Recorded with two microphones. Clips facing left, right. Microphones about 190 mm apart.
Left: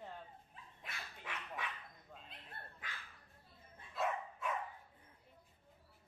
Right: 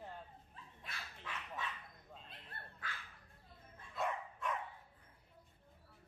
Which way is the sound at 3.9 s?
5° left (ahead or behind).